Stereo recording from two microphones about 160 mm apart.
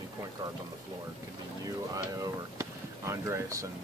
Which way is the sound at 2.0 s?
20° right (ahead or behind).